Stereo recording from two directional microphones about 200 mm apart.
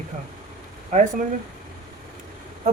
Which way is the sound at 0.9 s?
35° right (ahead or behind).